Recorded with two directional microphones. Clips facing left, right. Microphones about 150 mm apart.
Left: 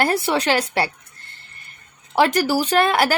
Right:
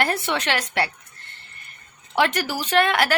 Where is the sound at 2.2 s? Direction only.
35° left (ahead or behind).